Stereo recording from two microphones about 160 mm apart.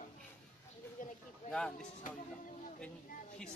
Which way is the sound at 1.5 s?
5° left (ahead or behind).